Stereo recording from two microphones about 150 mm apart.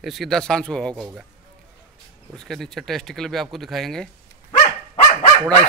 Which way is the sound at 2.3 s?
5° left (ahead or behind).